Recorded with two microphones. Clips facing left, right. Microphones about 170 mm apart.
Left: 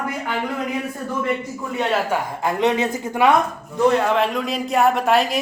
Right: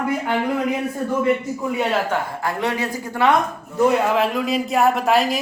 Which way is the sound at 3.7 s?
5° right (ahead or behind).